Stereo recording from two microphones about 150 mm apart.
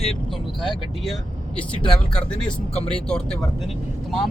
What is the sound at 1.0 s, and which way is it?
Speech, 5° left (ahead or behind).